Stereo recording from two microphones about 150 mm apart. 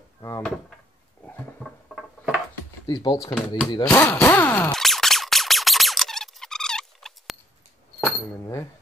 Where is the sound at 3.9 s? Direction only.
10° left (ahead or behind).